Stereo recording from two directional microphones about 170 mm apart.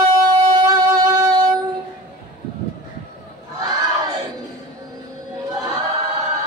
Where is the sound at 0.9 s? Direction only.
20° right (ahead or behind).